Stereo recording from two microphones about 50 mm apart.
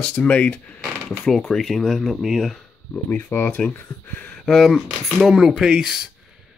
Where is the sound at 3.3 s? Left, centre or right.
Left.